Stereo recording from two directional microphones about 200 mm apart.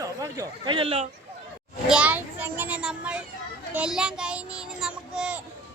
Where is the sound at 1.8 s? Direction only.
5° right (ahead or behind).